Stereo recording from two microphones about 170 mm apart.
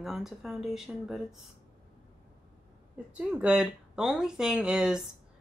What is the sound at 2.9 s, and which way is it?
Speech, 5° right (ahead or behind).